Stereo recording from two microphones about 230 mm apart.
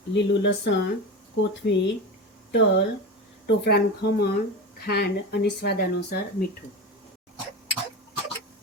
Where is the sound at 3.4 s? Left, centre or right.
Left.